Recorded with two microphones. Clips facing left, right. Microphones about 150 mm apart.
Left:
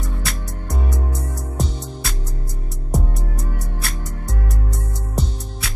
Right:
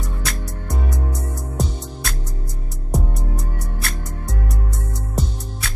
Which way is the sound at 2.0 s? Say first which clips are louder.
Even; centre (ahead or behind).